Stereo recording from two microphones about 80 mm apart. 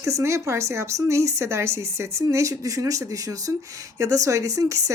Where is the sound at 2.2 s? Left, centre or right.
Right.